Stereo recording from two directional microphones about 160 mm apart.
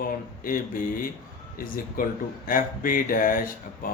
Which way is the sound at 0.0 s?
60° left (ahead or behind).